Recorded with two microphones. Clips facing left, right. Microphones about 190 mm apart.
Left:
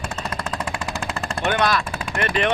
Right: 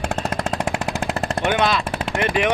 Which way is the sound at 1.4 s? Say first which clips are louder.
Even; 15° right (ahead or behind).